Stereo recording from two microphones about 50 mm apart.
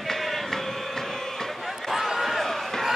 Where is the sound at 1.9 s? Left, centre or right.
Centre.